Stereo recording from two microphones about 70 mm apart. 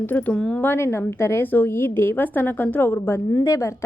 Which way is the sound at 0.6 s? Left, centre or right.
Left.